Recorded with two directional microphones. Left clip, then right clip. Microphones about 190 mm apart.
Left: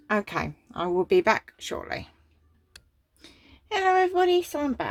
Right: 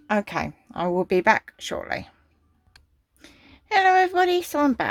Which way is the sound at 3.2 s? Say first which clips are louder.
Right 2 dB; 25° right (ahead or behind).